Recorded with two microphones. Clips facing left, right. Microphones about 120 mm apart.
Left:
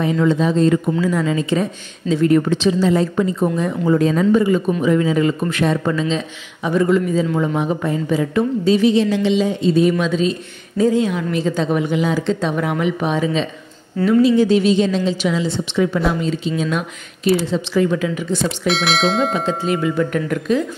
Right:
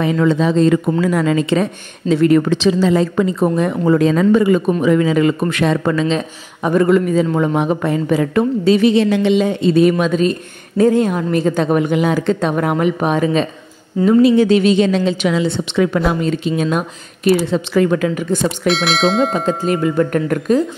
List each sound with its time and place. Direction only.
0.0 s speech: 90° right
1.0 s speech: 65° right (ahead or behind)
4.8 s a man's voice: 90° right; by 13.5 s 50° right (ahead or behind)
14.2 s a man's voice: 65° right (ahead or behind)
18.7 s speech: centre (ahead or behind)
19.3 s speech: 45° right (ahead or behind)